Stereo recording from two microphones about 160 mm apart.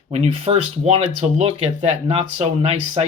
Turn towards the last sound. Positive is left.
turn(degrees=-40)  # may be behind; listen again after turning